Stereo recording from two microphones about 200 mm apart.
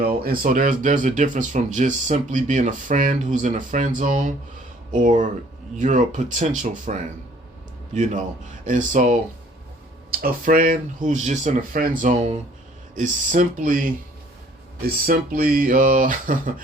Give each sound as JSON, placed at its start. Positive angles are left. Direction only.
{"t": 0.2, "sound": "speech", "side_deg": -45}
{"t": 8.6, "sound": "speech", "side_deg": -40}